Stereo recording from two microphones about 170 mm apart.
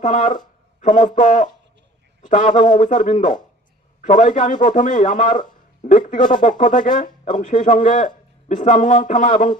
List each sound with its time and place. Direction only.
0.0 s a man's voice: 50° left (ahead or behind)